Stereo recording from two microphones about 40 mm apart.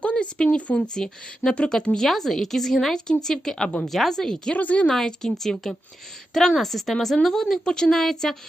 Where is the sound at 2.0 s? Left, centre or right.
Centre.